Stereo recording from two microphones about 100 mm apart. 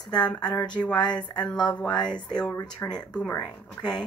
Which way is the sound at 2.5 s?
35° left (ahead or behind).